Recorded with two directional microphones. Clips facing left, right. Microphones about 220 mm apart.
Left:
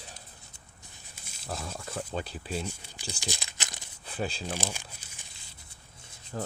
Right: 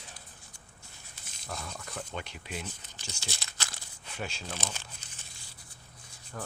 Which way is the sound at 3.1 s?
15° left (ahead or behind).